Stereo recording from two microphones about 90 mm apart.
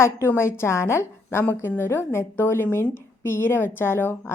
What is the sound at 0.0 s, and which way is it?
A woman's voice, 30° left (ahead or behind).